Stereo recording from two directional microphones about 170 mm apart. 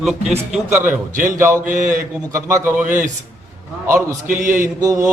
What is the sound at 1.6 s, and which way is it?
Speech, 50° right (ahead or behind).